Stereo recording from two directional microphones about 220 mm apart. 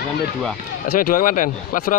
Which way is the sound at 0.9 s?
40° left (ahead or behind).